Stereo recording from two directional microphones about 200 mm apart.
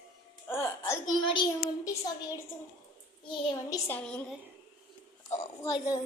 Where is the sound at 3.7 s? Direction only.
10° left (ahead or behind).